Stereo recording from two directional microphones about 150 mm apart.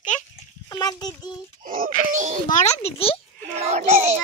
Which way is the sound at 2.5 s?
45° left (ahead or behind).